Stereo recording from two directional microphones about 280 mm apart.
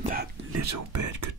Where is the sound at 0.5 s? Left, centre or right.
Right.